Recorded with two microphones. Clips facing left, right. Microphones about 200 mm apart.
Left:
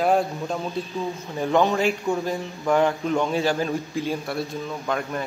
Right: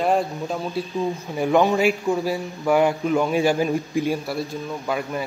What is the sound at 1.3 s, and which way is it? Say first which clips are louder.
A man's voice: right 2 dB; 15° right (ahead or behind).